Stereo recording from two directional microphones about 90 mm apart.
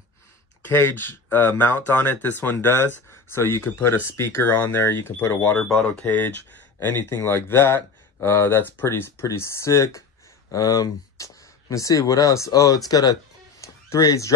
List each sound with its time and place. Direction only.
0.7 s speech: 20° left (ahead or behind); by 14.3 s 40° left (ahead or behind)